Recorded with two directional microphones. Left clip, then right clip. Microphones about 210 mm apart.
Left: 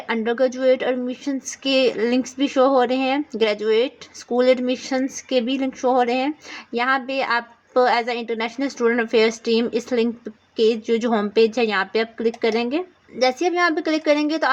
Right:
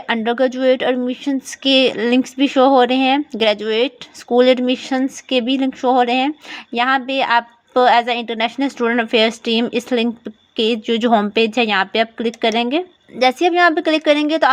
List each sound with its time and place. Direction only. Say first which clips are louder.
0.1 s a woman's voice: right 3 dB; 35° right (ahead or behind)